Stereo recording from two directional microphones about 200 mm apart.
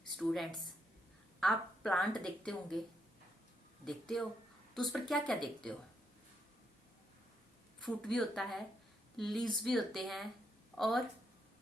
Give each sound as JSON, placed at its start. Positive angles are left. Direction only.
{"t": 0.2, "sound": "a woman's voice", "side_deg": 0}
{"t": 3.8, "sound": "a woman's voice", "side_deg": 0}
{"t": 7.8, "sound": "a woman's voice", "side_deg": 0}